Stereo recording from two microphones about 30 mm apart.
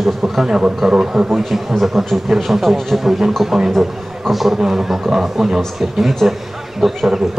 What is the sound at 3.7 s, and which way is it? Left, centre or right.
Speech, centre.